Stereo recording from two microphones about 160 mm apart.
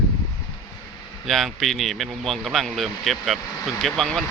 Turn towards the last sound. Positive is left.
turn(degrees=0)  # may be behind; listen again after turning